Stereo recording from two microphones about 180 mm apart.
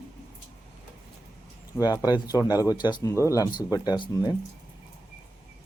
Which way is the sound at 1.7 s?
20° left (ahead or behind).